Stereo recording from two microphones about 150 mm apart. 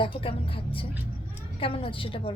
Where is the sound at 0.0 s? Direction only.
35° left (ahead or behind).